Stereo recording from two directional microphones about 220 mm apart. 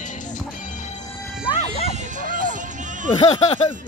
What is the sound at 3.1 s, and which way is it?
Speech, 25° left (ahead or behind).